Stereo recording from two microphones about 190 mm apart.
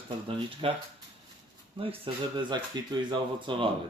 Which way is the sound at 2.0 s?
25° right (ahead or behind).